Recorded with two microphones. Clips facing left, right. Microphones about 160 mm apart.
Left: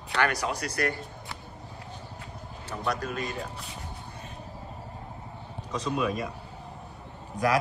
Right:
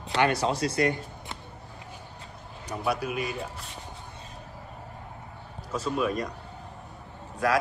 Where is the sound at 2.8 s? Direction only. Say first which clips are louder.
Right 2 dB; 10° right (ahead or behind).